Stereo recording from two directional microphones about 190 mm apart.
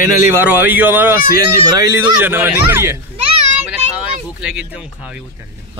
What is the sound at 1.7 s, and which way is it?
Speech, 20° right (ahead or behind).